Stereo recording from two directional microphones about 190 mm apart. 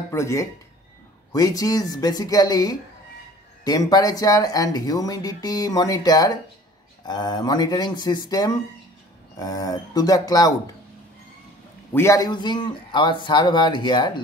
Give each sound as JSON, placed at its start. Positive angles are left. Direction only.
{"t": 0.1, "sound": "speech", "side_deg": 15}
{"t": 11.9, "sound": "speech", "side_deg": 15}